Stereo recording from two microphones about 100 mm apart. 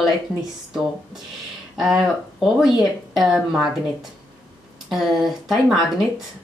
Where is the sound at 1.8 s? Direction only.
5° right (ahead or behind).